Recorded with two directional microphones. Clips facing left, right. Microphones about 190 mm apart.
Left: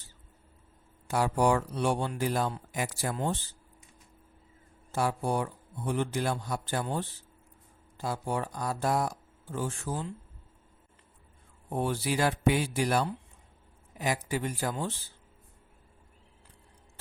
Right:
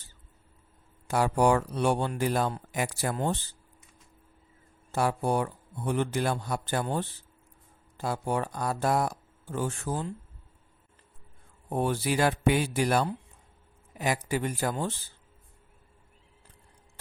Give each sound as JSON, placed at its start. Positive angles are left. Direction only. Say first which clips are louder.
{"t": 1.1, "sound": "speech", "louder": "right 2 dB", "side_deg": -55}
{"t": 4.9, "sound": "speech", "louder": "right 2 dB", "side_deg": -60}
{"t": 11.7, "sound": "speech", "louder": "right 2 dB", "side_deg": -55}